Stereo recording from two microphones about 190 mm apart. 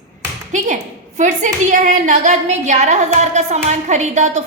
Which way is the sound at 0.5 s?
40° right (ahead or behind).